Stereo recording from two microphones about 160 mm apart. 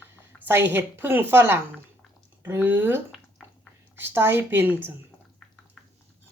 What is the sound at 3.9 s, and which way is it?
Speech, 15° right (ahead or behind).